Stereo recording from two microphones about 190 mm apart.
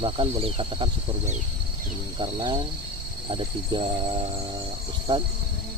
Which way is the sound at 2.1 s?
25° right (ahead or behind).